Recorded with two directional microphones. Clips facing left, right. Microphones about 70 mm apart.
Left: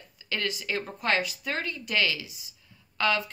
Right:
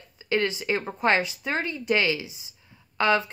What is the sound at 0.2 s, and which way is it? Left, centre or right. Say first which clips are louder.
Speech: right 7 dB; right.